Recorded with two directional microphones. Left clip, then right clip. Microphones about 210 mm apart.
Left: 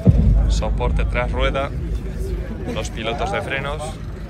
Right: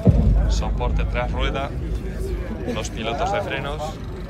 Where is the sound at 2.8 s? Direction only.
15° right (ahead or behind).